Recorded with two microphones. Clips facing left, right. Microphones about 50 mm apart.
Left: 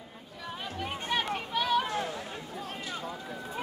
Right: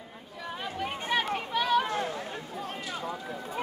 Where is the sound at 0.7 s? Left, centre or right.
Centre.